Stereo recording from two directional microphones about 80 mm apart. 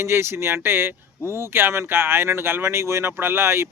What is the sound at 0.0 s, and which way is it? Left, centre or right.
Speech, right.